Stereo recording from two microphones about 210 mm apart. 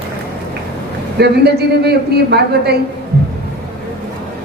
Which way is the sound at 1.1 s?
50° right (ahead or behind).